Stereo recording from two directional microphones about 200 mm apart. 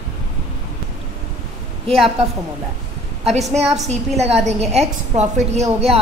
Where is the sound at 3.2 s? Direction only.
30° right (ahead or behind).